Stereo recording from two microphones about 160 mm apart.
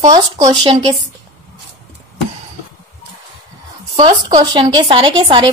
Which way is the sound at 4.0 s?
30° right (ahead or behind).